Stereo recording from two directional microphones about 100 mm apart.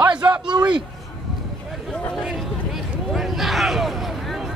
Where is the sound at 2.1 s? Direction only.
Centre (ahead or behind).